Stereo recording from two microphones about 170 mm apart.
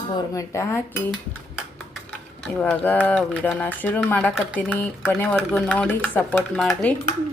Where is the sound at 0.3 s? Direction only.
15° left (ahead or behind).